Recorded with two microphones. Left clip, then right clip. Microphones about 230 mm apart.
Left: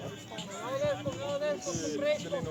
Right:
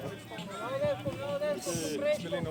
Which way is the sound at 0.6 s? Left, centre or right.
Left.